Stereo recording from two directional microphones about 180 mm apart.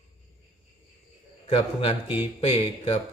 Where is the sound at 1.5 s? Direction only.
30° left (ahead or behind).